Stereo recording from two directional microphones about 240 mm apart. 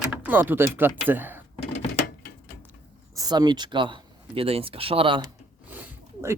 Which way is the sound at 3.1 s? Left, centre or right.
Centre.